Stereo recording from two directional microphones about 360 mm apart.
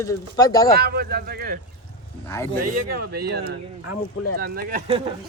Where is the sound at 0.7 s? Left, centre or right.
Right.